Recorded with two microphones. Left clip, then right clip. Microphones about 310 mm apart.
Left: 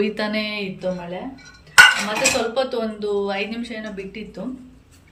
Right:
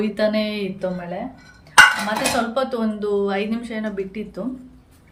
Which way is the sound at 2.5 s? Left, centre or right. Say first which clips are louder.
Even; centre.